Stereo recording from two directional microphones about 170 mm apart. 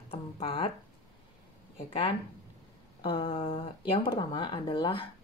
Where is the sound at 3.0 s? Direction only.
30° left (ahead or behind).